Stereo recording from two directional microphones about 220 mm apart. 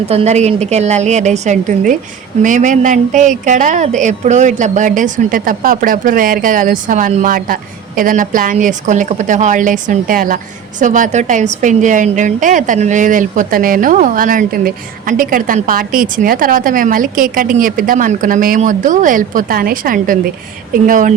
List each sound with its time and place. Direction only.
0.0 s speech: 25° right (ahead or behind)